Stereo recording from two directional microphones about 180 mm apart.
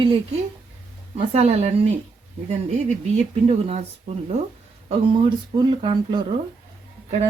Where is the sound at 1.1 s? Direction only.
35° right (ahead or behind).